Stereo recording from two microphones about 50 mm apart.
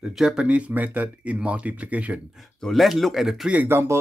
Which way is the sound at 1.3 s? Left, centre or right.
Right.